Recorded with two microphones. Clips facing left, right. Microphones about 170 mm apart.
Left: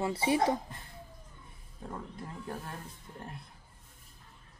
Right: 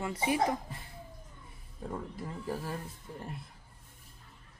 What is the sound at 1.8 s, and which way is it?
Speech, 5° right (ahead or behind).